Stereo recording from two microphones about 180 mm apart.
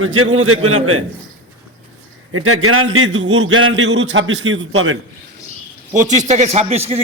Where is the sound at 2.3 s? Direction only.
90° right.